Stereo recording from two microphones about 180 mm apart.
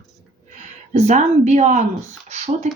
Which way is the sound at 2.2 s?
40° right (ahead or behind).